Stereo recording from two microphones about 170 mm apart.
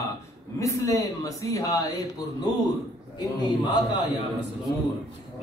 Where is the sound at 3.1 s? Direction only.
25° left (ahead or behind).